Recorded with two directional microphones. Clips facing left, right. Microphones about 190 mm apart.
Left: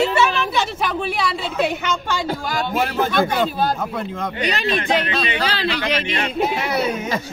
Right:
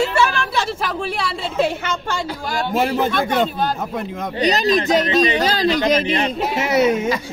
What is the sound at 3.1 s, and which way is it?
Speech, 5° left (ahead or behind).